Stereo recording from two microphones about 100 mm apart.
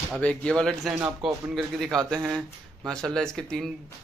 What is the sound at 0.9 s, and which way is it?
Speech, 5° right (ahead or behind).